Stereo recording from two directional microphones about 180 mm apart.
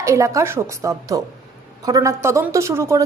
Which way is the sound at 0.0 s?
15° right (ahead or behind).